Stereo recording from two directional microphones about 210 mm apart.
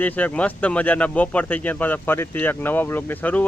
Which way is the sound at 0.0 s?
5° left (ahead or behind).